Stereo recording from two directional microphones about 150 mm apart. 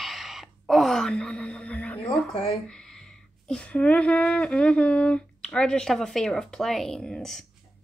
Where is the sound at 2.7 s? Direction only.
5° left (ahead or behind).